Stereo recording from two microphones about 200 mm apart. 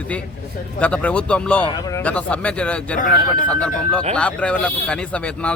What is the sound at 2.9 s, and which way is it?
Speech, 40° left (ahead or behind).